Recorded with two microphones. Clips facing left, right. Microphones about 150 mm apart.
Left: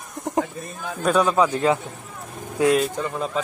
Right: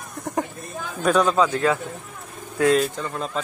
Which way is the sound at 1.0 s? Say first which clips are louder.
Even; 5° left (ahead or behind).